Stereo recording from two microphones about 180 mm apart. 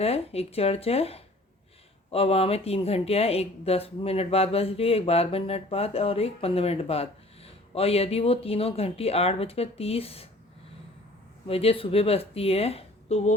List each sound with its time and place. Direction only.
0.0 s speech: 35° left (ahead or behind)
11.4 s speech: 30° left (ahead or behind)